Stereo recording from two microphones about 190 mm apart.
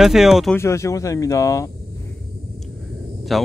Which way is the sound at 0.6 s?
15° left (ahead or behind).